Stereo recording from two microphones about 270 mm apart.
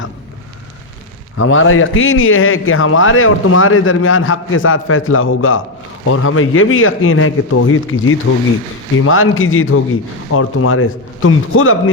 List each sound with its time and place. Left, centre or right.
1.4 s a man's voice: left